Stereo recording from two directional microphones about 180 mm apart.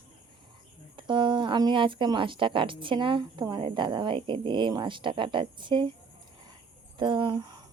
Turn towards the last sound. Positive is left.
turn(degrees=-25)  # may be behind; listen again after turning